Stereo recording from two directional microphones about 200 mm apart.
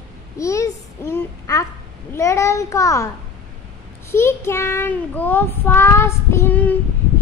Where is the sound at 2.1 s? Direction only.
15° left (ahead or behind).